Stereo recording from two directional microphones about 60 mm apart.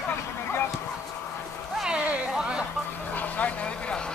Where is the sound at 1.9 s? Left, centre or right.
Centre.